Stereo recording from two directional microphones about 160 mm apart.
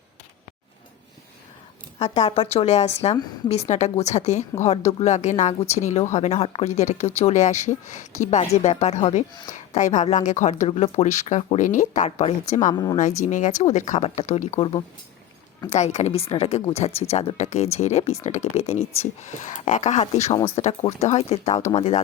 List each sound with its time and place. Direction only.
2.0 s a woman's voice: 40° left (ahead or behind)
10.7 s speech: 40° left (ahead or behind)
12.7 s speech: 20° left (ahead or behind)
13.0 s speech: 50° left (ahead or behind)
15.7 s a woman's voice: 45° left (ahead or behind)